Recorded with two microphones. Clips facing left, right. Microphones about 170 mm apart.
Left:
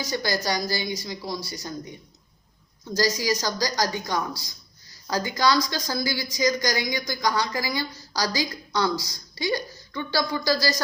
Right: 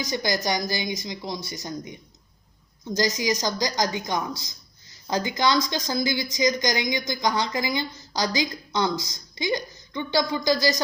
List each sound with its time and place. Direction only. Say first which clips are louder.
0.0 s a woman's voice: right 1 dB; 20° right (ahead or behind)